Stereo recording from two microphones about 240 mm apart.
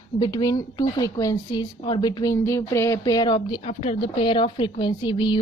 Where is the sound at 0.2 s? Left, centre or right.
Centre.